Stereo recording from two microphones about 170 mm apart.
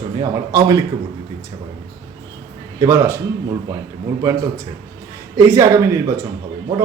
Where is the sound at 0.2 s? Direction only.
20° right (ahead or behind).